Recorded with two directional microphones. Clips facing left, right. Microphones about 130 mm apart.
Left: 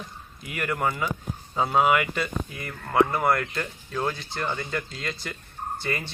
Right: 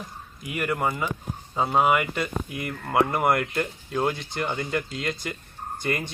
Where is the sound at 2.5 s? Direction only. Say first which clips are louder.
Left 1 dB; 20° right (ahead or behind).